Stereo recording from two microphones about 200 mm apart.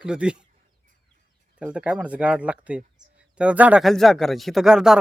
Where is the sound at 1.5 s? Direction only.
5° right (ahead or behind).